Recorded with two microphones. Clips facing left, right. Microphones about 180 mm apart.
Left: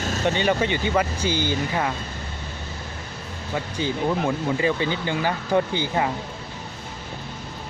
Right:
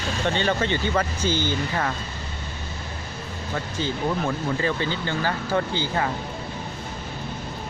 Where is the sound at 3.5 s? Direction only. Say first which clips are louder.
Left 2 dB; 15° left (ahead or behind).